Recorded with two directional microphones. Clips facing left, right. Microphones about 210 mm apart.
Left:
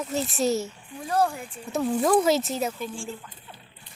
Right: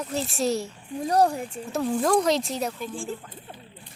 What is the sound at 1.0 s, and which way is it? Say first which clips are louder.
Speech: right 3 dB; 40° right (ahead or behind).